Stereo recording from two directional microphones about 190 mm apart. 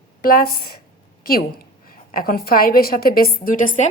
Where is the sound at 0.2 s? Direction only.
50° left (ahead or behind).